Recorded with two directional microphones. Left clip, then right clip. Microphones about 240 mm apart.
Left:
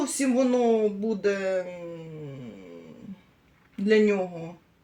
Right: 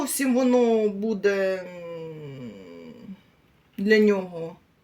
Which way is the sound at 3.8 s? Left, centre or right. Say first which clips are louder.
Right 2 dB; right.